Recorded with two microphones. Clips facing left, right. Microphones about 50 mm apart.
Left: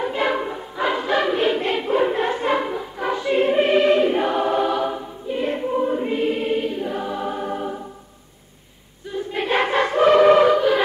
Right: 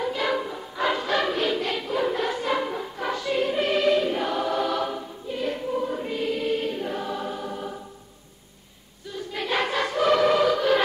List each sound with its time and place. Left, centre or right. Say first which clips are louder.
0.0 s choir: left 4 dB; left
0.7 s music: left 3 dB; centre
1.4 s choir: left 5 dB; left
2.7 s music: left 4 dB; centre
3.2 s choir: left 7 dB; left
4.6 s choir: left 4 dB; centre
6.6 s music: left 4 dB; centre; by 7.7 s left
9.1 s choir: left 5 dB; left